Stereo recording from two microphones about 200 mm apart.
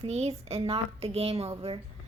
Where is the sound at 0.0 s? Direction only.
30° right (ahead or behind).